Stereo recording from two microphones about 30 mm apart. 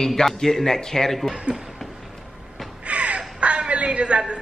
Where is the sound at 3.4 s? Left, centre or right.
Right.